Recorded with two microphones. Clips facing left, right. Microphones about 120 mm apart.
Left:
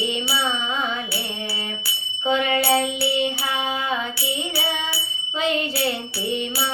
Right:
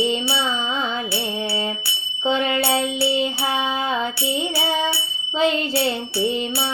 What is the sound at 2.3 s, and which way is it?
Music, 30° right (ahead or behind).